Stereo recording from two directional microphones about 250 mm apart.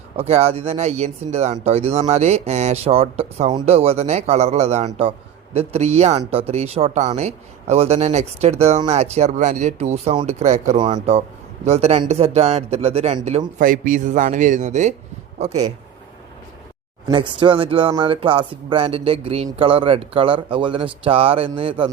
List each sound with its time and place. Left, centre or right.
0.2 s speech: right
17.1 s speech: centre